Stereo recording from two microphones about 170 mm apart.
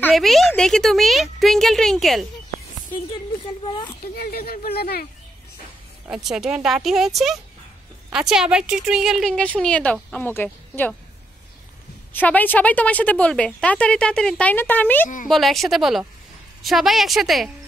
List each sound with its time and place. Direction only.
0.0 s speech: centre (ahead or behind)
4.0 s speech: 65° left (ahead or behind)
6.0 s speech: 5° right (ahead or behind)
12.1 s a woman's voice: 10° left (ahead or behind)
15.2 s speech: centre (ahead or behind)